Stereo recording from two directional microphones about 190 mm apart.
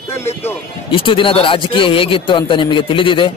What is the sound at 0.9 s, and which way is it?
Speech, 25° left (ahead or behind).